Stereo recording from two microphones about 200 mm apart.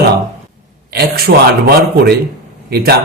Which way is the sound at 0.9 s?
50° right (ahead or behind).